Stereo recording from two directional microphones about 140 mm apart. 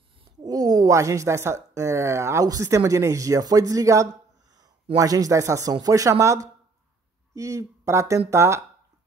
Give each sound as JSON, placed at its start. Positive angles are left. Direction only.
{"t": 0.4, "sound": "speech", "side_deg": -30}